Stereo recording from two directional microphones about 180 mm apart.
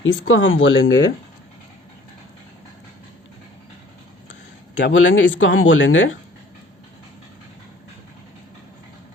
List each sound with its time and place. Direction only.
0.0 s speech: 90° left
4.8 s speech: 90° left